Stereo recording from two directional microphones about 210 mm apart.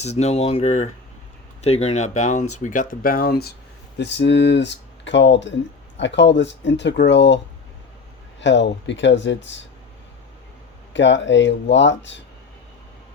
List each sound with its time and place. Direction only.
0.0 s speech: 30° left (ahead or behind); by 9.5 s 60° left (ahead or behind)
10.9 s speech: 60° left (ahead or behind)